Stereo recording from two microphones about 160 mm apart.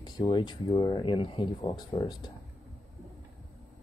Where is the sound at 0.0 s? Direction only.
30° left (ahead or behind).